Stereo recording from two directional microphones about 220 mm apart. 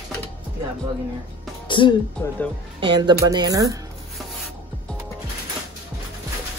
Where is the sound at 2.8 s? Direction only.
20° right (ahead or behind).